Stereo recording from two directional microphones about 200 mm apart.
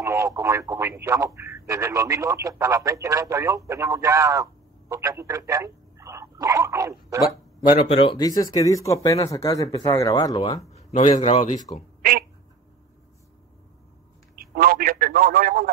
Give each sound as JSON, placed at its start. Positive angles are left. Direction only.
{"t": 0.0, "sound": "speech", "side_deg": -15}
{"t": 8.0, "sound": "speech", "side_deg": 20}
{"t": 10.7, "sound": "a man's voice", "side_deg": 35}
{"t": 12.0, "sound": "a sound", "side_deg": -45}
{"t": 14.3, "sound": "a man's voice", "side_deg": -45}